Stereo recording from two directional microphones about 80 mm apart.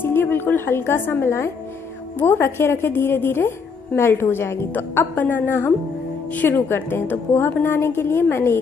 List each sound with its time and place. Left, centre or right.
0.0 s a woman's voice: left